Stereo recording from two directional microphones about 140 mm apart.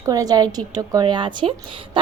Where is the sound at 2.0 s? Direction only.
35° right (ahead or behind).